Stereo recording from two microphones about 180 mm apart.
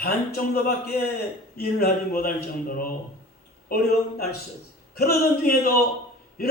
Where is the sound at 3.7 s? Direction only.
55° left (ahead or behind).